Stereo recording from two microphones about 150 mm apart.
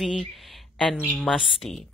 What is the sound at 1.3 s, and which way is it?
Speech, centre (ahead or behind).